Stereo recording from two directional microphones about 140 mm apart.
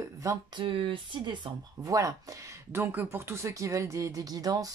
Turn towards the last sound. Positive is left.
turn(degrees=-25)  # may be behind; listen again after turning